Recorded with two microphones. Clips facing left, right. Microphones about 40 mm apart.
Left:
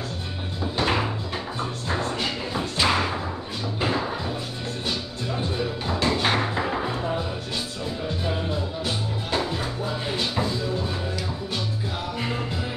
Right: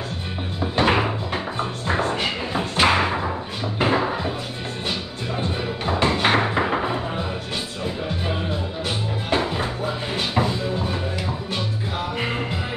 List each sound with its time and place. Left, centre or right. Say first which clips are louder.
0.6 s music: right 5 dB; right
5.6 s music: right 5 dB; right
8.8 s music: right 2 dB; right
12.2 s music: right 3 dB; right